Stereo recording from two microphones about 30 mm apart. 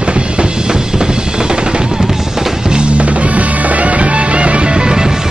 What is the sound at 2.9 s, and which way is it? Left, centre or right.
Music, right.